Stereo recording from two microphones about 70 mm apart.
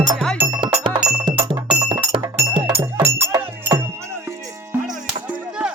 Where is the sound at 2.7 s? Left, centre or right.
Right.